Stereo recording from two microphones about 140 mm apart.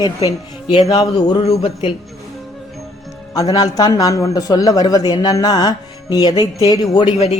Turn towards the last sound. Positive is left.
turn(degrees=50)  # may be behind; listen again after turning